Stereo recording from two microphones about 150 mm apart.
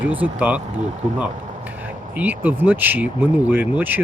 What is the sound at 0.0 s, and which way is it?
Speech, 10° right (ahead or behind).